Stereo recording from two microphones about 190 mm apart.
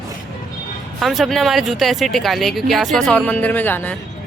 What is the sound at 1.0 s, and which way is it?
Speech, centre (ahead or behind).